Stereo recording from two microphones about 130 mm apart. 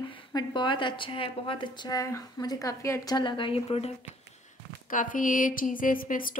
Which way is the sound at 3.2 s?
40° left (ahead or behind).